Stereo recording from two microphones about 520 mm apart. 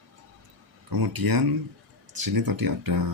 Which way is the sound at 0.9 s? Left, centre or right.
Right.